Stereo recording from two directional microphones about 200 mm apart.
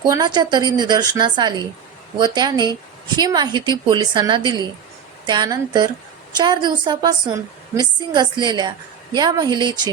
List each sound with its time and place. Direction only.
0.0 s a woman's voice: 20° right (ahead or behind)